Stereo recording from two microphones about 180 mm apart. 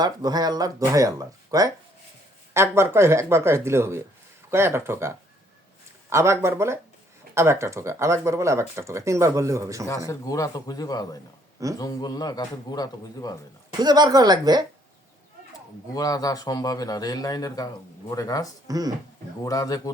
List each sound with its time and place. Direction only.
0.0 s speech: 20° right (ahead or behind)
10.1 s a man's voice: 20° left (ahead or behind)
13.7 s speech: 20° right (ahead or behind)
16.0 s a man's voice: 20° left (ahead or behind)
18.7 s speech: 20° right (ahead or behind)
19.5 s a man's voice: 20° left (ahead or behind)